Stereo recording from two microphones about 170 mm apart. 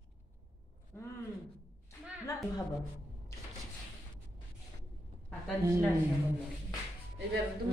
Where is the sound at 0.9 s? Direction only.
15° left (ahead or behind).